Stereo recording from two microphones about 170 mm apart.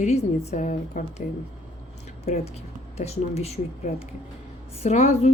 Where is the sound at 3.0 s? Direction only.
40° left (ahead or behind).